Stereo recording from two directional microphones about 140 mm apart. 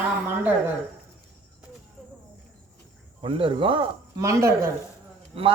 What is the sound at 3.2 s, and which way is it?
Speech, 40° right (ahead or behind).